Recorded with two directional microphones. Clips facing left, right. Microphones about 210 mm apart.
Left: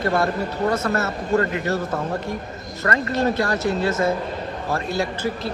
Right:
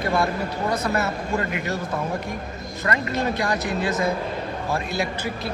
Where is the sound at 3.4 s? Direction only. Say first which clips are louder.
Left 3 dB; 15° right (ahead or behind).